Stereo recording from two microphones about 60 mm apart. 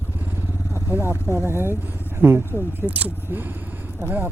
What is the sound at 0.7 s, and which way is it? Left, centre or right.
Vehicle, right.